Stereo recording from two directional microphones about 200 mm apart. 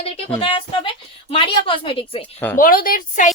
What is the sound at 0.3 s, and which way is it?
A woman's voice, 25° left (ahead or behind).